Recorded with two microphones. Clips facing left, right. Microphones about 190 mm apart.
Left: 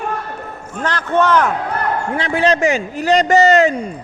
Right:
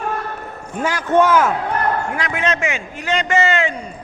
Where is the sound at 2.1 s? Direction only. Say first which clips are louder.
Left 6 dB; 30° left (ahead or behind).